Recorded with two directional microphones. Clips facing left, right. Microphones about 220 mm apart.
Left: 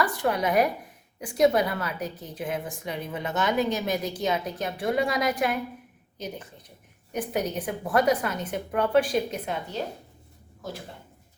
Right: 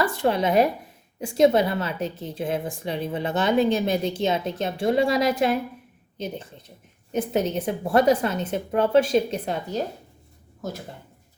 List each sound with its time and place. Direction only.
0.0 s a woman's voice: 25° right (ahead or behind)